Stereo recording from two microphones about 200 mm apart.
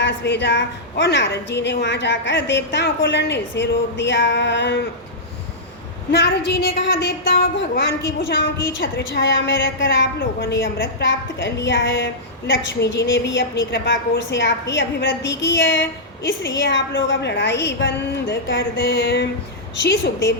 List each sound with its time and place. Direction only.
0.0 s a woman's voice: 60° left (ahead or behind)
6.1 s a woman's voice: 60° left (ahead or behind)